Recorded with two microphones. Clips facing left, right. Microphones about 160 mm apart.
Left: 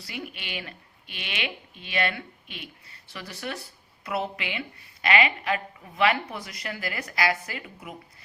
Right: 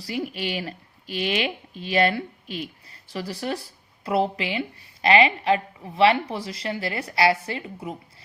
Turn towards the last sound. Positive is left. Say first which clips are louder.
# right 7 dB
turn(degrees=-30)  # may be behind; listen again after turning